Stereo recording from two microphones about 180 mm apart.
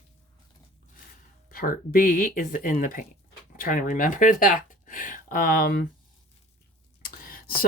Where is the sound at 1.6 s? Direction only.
50° left (ahead or behind).